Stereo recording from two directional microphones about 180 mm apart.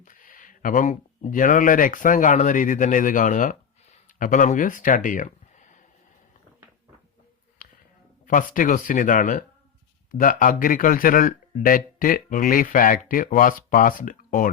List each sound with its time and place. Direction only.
0.0 s speech: 50° left (ahead or behind)
7.6 s a sound: 50° left (ahead or behind)
8.3 s speech: 50° left (ahead or behind)